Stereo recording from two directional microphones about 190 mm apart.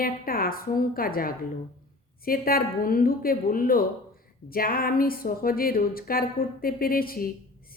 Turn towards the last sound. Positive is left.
turn(degrees=50)  # may be behind; listen again after turning